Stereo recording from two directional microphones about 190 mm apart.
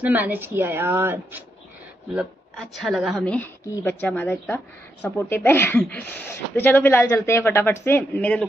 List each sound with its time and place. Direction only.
0.0 s a woman's voice: 10° right (ahead or behind)
2.1 s speech: centre (ahead or behind)